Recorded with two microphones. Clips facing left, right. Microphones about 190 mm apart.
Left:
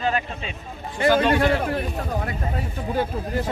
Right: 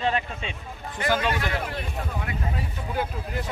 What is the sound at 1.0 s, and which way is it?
Speech, 30° left (ahead or behind).